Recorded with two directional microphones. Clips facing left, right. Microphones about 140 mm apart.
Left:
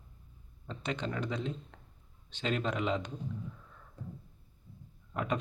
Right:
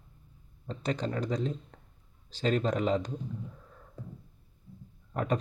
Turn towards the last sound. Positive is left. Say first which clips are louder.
# right 3 dB
turn(degrees=-40)  # may be behind; listen again after turning